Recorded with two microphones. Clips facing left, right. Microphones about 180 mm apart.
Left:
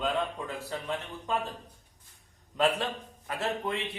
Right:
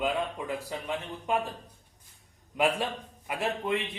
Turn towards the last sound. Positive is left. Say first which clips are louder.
# right 2 dB
turn(degrees=-15)  # may be behind; listen again after turning